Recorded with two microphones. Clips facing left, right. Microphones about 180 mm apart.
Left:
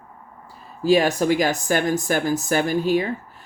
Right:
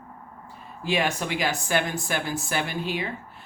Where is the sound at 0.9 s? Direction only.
40° left (ahead or behind).